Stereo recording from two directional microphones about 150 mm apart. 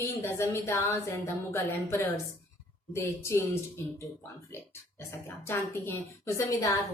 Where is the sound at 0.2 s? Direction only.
20° left (ahead or behind).